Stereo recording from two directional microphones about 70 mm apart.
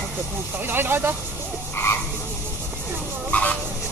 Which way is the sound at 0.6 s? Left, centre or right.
Right.